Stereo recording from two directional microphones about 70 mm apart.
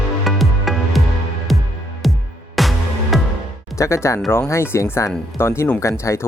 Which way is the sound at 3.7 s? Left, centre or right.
Left.